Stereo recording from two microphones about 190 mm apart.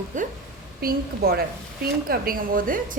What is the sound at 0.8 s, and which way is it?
A woman's voice, 55° right (ahead or behind).